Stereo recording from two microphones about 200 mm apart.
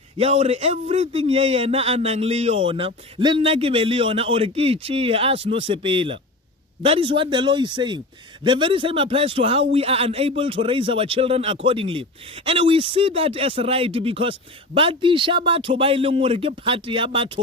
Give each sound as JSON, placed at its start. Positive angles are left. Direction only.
{"t": 0.2, "sound": "speech", "side_deg": -30}